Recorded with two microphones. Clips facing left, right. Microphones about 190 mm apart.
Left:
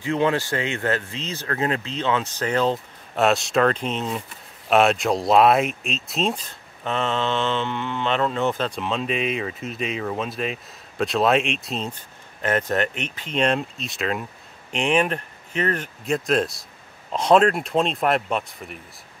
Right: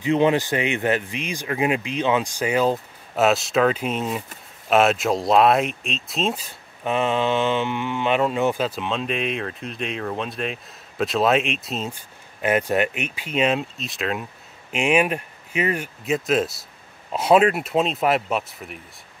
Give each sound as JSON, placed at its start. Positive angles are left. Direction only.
{"t": 0.0, "sound": "speech", "side_deg": -20}